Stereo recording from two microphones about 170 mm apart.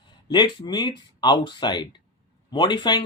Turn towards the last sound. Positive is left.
turn(degrees=25)  # may be behind; listen again after turning